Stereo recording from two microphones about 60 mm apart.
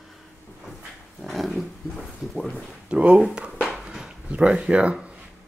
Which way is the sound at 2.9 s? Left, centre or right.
Centre.